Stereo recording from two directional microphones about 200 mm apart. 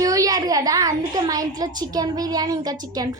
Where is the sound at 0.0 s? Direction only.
15° right (ahead or behind).